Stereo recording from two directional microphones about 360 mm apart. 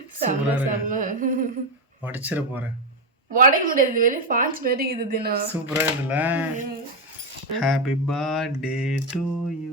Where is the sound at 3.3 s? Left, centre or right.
Right.